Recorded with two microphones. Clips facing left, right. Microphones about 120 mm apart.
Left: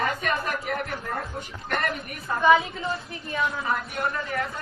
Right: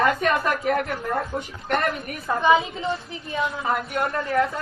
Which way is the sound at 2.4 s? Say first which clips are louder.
Even; 25° right (ahead or behind).